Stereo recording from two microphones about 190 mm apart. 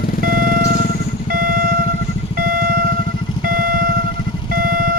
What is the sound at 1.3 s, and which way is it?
Vehicle, 50° right (ahead or behind).